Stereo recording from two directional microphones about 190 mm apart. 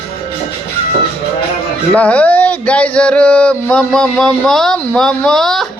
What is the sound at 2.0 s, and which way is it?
A man's voice, 5° left (ahead or behind).